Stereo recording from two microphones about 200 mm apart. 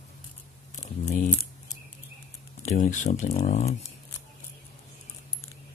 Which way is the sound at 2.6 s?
35° left (ahead or behind).